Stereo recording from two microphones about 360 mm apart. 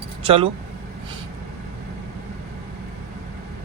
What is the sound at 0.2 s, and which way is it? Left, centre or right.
Speech, centre.